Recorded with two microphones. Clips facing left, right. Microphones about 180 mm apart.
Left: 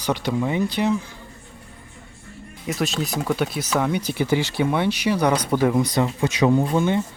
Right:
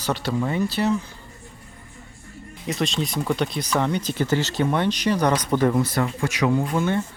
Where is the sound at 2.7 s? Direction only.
5° left (ahead or behind).